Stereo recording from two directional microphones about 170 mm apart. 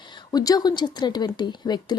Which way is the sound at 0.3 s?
25° left (ahead or behind).